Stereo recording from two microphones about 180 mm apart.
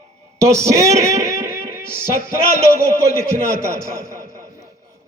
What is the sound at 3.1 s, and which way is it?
Music, 15° right (ahead or behind).